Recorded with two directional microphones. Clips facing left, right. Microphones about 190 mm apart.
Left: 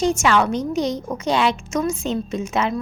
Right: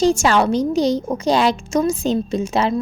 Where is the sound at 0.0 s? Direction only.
35° right (ahead or behind).